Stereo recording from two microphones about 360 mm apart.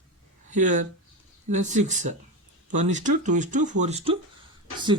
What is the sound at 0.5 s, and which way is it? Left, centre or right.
Speech, right.